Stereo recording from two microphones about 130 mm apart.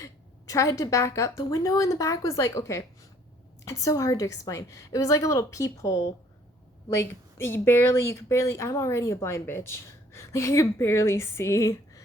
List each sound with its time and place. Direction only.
0.0 s a woman's voice: 25° left (ahead or behind)